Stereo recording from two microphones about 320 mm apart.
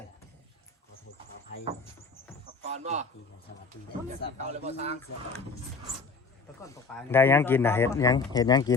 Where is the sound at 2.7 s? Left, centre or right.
Right.